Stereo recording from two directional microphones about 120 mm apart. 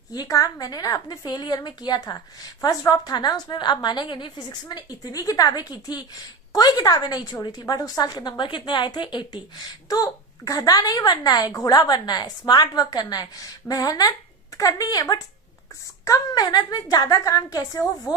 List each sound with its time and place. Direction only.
0.1 s a woman's voice: 30° left (ahead or behind)